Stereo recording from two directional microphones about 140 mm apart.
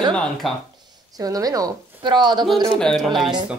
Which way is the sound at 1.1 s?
25° right (ahead or behind).